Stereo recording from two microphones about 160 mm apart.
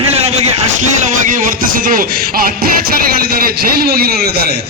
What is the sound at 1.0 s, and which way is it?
A man's voice, 55° right (ahead or behind).